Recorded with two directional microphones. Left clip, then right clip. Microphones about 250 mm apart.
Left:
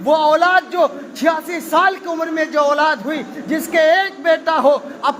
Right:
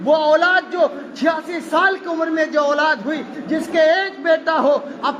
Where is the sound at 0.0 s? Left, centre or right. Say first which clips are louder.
Left 1 dB; left.